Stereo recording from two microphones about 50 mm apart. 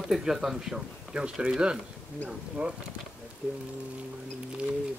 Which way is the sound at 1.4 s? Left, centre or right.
Centre.